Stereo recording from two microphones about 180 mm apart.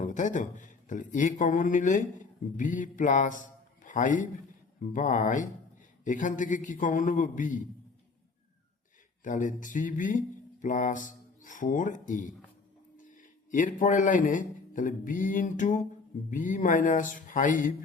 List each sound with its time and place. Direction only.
0.0 s speech: 45° left (ahead or behind)
9.2 s a man's voice: 45° left (ahead or behind)